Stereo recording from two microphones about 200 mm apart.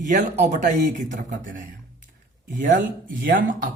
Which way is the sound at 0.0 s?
40° right (ahead or behind).